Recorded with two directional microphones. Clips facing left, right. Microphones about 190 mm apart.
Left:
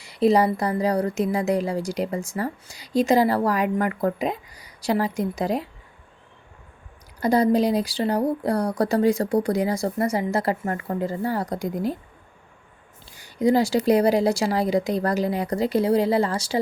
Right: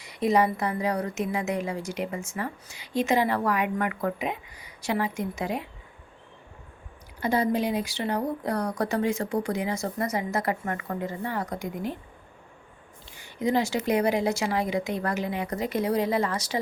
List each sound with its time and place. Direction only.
0.0 s a woman's voice: 30° left (ahead or behind)
7.2 s a woman's voice: 40° left (ahead or behind)
13.1 s a woman's voice: 35° left (ahead or behind)